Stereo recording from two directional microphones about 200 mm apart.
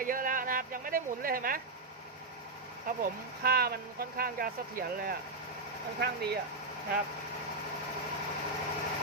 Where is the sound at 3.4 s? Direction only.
50° right (ahead or behind).